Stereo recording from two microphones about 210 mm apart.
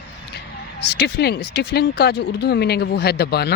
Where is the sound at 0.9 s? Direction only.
55° left (ahead or behind).